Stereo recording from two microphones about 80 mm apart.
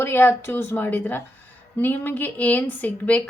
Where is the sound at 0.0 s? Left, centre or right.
Left.